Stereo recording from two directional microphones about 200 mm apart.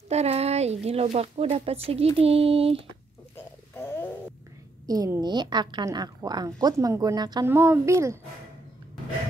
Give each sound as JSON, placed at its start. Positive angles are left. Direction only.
{"t": 0.1, "sound": "a woman's voice", "side_deg": -30}
{"t": 3.3, "sound": "a sound", "side_deg": 10}
{"t": 4.8, "sound": "a woman's voice", "side_deg": -20}